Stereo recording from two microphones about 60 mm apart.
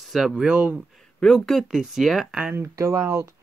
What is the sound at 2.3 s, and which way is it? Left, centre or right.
Speech, centre.